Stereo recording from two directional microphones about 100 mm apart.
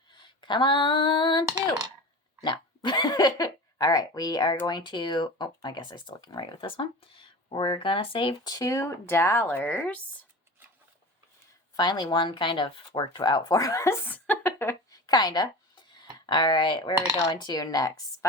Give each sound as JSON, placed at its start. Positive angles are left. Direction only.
{"t": 0.1, "sound": "female singing", "side_deg": 50}
{"t": 2.4, "sound": "hiccup", "side_deg": 50}
{"t": 4.6, "sound": "speech", "side_deg": 50}
{"t": 8.4, "sound": "speech", "side_deg": 35}
{"t": 11.8, "sound": "speech", "side_deg": 45}
{"t": 14.3, "sound": "a sound", "side_deg": 20}
{"t": 14.8, "sound": "a sound", "side_deg": 40}
{"t": 16.2, "sound": "a woman's voice", "side_deg": 50}